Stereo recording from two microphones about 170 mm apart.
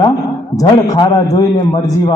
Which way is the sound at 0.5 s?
20° left (ahead or behind).